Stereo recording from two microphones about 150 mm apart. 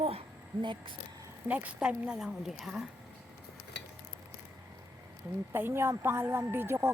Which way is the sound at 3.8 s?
90° left.